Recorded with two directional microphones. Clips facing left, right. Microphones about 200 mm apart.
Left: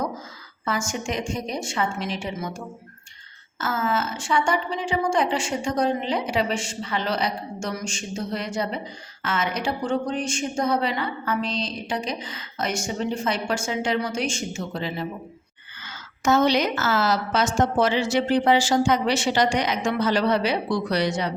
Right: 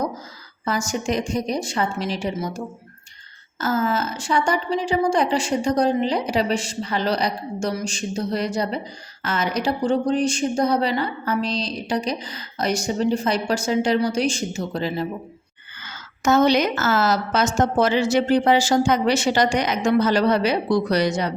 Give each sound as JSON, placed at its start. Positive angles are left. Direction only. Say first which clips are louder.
{"t": 0.6, "sound": "speech", "louder": "right 3 dB", "side_deg": -35}
{"t": 3.6, "sound": "speech", "louder": "right 3 dB", "side_deg": -40}
{"t": 16.2, "sound": "a woman's voice", "louder": "right 3 dB", "side_deg": -45}